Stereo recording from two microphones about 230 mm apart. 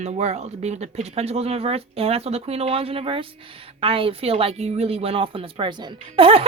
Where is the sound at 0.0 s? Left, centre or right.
Right.